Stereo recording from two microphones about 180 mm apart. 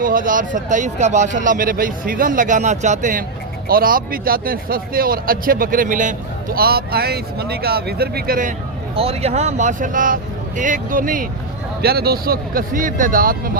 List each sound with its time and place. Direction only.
0.0 s a man's voice: 50° right (ahead or behind)
9.0 s speech: 35° right (ahead or behind); by 13.5 s 50° right (ahead or behind)